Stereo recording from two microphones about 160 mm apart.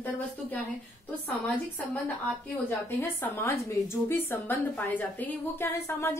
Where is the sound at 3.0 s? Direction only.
15° left (ahead or behind).